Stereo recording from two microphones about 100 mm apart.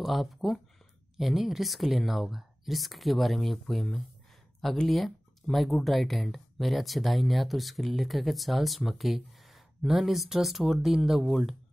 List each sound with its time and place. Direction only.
0.0 s speech: centre (ahead or behind)